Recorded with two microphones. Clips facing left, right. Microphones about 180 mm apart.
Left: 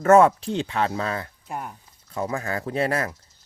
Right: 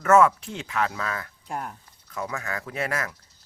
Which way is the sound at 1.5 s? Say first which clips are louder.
Right 2 dB; 5° left (ahead or behind).